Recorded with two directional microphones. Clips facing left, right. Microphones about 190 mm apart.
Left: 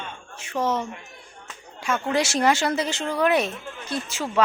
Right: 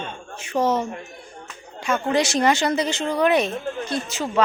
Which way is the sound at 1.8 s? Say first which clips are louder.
Right 3 dB; 5° left (ahead or behind).